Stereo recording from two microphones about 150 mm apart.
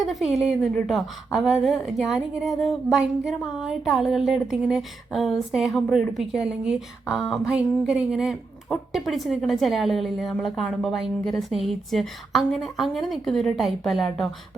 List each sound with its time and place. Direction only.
0.0 s a woman's voice: centre (ahead or behind)